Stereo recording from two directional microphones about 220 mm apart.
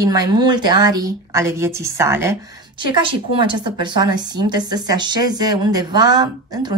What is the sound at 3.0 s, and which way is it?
A woman's voice, 20° right (ahead or behind).